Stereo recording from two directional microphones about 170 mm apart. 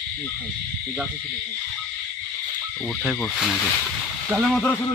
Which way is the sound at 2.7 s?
5° left (ahead or behind).